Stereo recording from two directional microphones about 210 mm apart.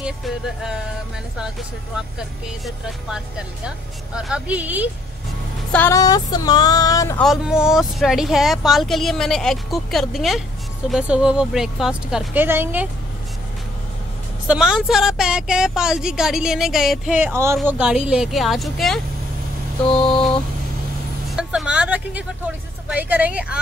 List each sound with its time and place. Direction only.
3.6 s speech: 5° right (ahead or behind)
5.7 s speech: 10° left (ahead or behind)
7.2 s speech: centre (ahead or behind)
14.5 s speech: centre (ahead or behind)
19.9 s mantra: 25° left (ahead or behind)
21.4 s a woman's voice: 5° right (ahead or behind)